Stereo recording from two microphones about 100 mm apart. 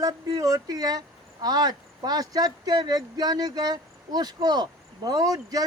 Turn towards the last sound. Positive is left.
turn(degrees=-40)  # may be behind; listen again after turning